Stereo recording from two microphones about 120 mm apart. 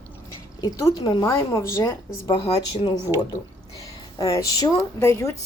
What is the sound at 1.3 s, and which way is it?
Speech, 25° left (ahead or behind).